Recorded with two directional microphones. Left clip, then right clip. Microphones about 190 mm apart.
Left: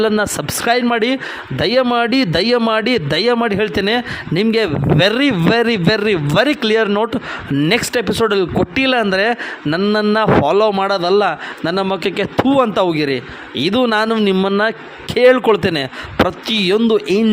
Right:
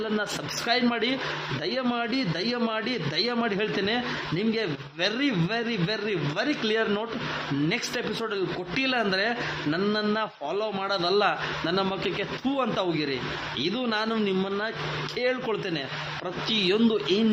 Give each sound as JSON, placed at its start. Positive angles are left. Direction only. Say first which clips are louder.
{"t": 0.0, "sound": "a man's voice", "louder": "left 13 dB", "side_deg": 45}